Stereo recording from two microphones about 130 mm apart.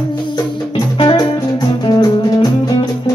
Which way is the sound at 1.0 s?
40° left (ahead or behind).